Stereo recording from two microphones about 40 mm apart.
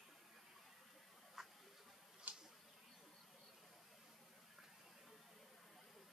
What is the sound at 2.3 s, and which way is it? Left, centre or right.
Insect, right.